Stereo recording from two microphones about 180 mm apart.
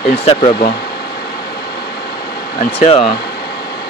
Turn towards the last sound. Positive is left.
turn(degrees=35)  # may be behind; listen again after turning